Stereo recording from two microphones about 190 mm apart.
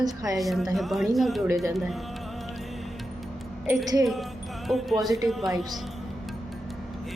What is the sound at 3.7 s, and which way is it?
Speech, 10° right (ahead or behind).